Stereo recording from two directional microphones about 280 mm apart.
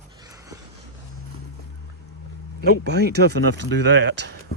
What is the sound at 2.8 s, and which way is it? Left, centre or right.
Speech, right.